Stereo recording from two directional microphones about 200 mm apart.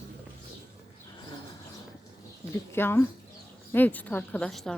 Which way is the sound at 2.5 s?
10° left (ahead or behind).